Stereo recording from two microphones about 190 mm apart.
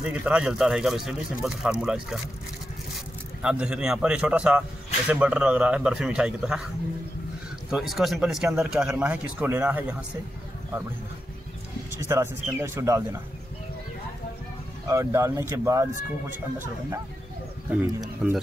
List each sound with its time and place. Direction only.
0.0 s a man's voice: 5° right (ahead or behind)
3.4 s a man's voice: 5° right (ahead or behind)
7.7 s a man's voice: centre (ahead or behind)
12.0 s a man's voice: 15° right (ahead or behind)
14.9 s a man's voice: 15° right (ahead or behind)
18.0 s a man's voice: 5° right (ahead or behind)